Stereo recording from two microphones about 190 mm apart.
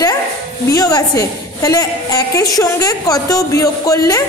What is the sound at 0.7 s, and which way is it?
A woman's voice, 20° left (ahead or behind).